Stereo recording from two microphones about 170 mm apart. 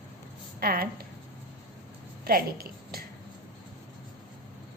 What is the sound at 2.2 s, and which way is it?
Speech, 60° right (ahead or behind).